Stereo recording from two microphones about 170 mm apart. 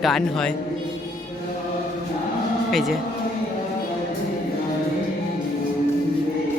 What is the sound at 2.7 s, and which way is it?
Speech, centre (ahead or behind).